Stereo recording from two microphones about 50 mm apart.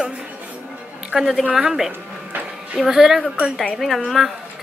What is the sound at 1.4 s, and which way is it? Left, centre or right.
A woman's voice, centre.